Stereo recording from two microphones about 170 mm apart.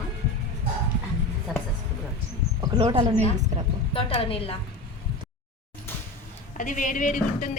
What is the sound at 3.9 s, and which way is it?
Speech, 35° left (ahead or behind).